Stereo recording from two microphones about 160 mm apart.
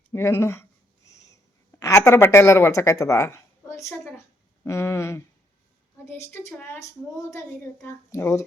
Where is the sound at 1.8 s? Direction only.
20° left (ahead or behind).